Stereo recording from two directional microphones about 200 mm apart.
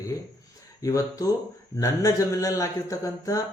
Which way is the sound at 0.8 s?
15° left (ahead or behind).